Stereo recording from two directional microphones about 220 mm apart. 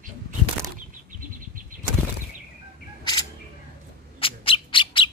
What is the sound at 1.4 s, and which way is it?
Vehicle, 40° right (ahead or behind).